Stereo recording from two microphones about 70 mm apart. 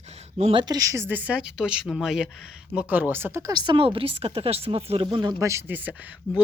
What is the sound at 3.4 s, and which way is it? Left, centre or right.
Speech, right.